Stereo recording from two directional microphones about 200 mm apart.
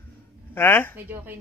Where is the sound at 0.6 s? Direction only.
10° left (ahead or behind).